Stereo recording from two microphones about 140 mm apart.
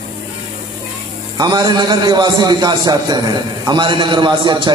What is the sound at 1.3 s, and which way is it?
A man's voice, 30° right (ahead or behind).